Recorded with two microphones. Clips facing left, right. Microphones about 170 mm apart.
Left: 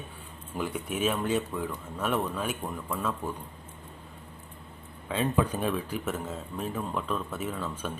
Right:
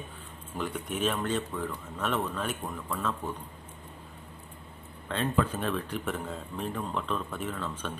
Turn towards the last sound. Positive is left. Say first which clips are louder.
# left 1 dB
turn(degrees=10)  # may be behind; listen again after turning